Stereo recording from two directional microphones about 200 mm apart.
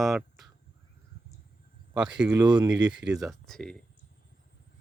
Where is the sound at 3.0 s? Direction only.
5° right (ahead or behind).